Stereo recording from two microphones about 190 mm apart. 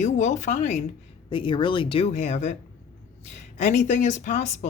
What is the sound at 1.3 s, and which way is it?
Speech, 25° left (ahead or behind).